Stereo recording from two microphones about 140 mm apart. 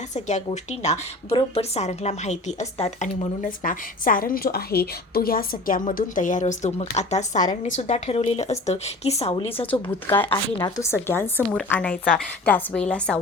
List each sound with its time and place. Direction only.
0.1 s a woman's voice: 55° left (ahead or behind)
3.4 s a woman's voice: 75° left (ahead or behind); by 9.7 s 45° left (ahead or behind)
9.8 s a woman's voice: 15° left (ahead or behind)
10.2 s a woman's voice: 30° left (ahead or behind); by 13.1 s 5° left (ahead or behind)